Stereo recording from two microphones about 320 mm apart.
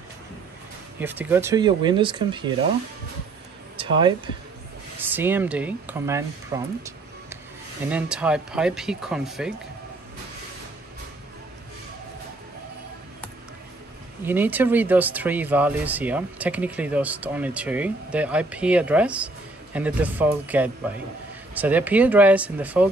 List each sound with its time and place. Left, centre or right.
0.9 s speech: centre
3.7 s a sound: centre
5.0 s speech: centre
7.9 s speech: centre
14.2 s speech: centre